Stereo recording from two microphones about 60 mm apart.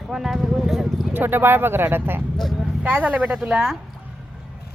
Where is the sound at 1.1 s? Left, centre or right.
Right.